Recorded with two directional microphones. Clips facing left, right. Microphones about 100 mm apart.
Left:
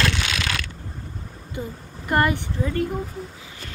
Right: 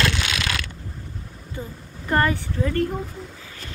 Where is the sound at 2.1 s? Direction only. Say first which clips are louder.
Even; 15° left (ahead or behind).